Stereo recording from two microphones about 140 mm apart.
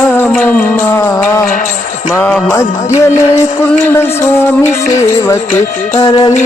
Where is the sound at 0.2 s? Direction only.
10° left (ahead or behind).